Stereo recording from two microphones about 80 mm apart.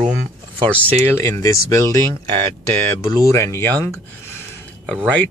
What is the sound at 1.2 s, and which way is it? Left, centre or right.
Speech, left.